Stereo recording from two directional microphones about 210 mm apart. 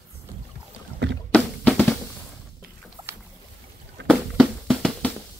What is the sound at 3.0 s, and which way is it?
Boat, 20° right (ahead or behind).